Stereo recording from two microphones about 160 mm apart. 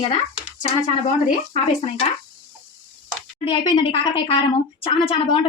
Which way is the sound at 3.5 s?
35° left (ahead or behind).